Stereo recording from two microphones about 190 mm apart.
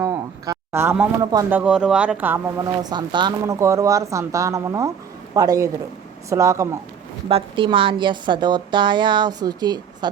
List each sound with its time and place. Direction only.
0.0 s a sound: 20° right (ahead or behind)
1.2 s a woman's voice: 20° right (ahead or behind)
1.5 s speech: 5° right (ahead or behind)
2.6 s speech: 25° right (ahead or behind)
7.3 s a woman's voice: 30° right (ahead or behind)